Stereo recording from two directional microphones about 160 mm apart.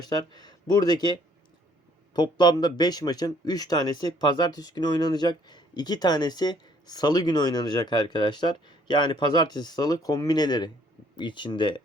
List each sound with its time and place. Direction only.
0.0 s speech: 25° left (ahead or behind)